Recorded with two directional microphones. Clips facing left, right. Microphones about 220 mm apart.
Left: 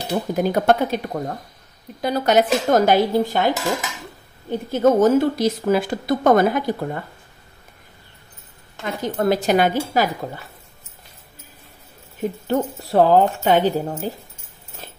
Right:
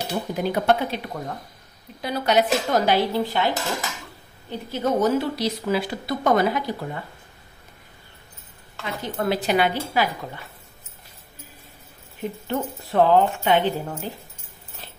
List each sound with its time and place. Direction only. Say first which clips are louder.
0.4 s a woman's voice: left 3 dB; 45° left (ahead or behind)
8.8 s a woman's voice: left 5 dB; 45° left (ahead or behind)
12.2 s speech: left 5 dB; 40° left (ahead or behind)
14.8 s dog: left 5 dB; 45° left (ahead or behind)